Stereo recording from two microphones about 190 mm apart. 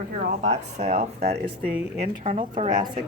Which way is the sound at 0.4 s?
35° right (ahead or behind).